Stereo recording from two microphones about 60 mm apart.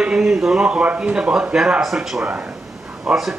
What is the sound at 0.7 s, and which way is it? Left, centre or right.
A man's voice, centre.